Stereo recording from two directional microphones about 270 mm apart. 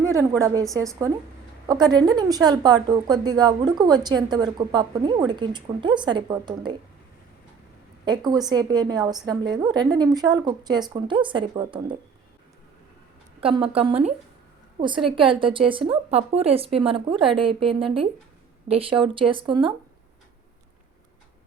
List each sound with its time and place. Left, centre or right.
0.0 s a woman's voice: centre
8.0 s speech: centre
13.4 s a woman's voice: right